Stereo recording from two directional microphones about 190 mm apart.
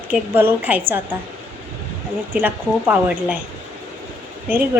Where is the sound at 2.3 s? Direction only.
10° right (ahead or behind).